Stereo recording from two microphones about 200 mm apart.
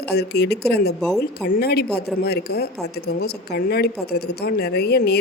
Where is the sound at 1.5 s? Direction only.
55° left (ahead or behind).